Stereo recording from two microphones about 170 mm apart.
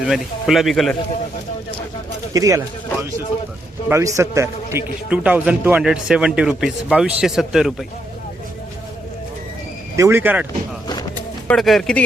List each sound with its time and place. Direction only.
0.0 s a man's voice: centre (ahead or behind)
2.3 s speech: 20° right (ahead or behind)
3.8 s a man's voice: 15° right (ahead or behind)
9.9 s speech: 15° right (ahead or behind)
11.4 s a man's voice: centre (ahead or behind)